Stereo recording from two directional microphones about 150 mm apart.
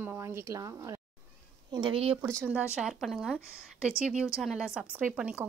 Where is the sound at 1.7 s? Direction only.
35° right (ahead or behind).